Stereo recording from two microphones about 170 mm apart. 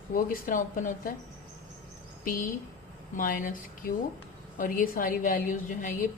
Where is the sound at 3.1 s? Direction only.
55° left (ahead or behind).